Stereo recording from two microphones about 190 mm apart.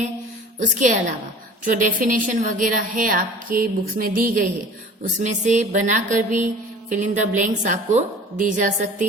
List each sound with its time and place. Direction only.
0.6 s a woman's voice: 40° right (ahead or behind)